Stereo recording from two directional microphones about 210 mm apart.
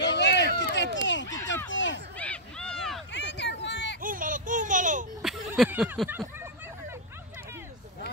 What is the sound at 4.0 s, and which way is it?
Baby laughter, 40° right (ahead or behind).